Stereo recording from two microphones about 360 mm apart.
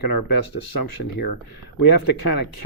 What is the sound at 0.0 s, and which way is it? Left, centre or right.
Speech, left.